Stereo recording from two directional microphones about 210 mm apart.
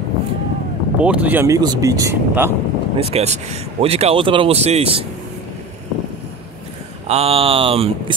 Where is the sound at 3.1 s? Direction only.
30° right (ahead or behind).